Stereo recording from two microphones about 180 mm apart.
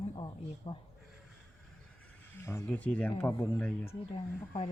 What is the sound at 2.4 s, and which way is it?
Speech, 15° left (ahead or behind).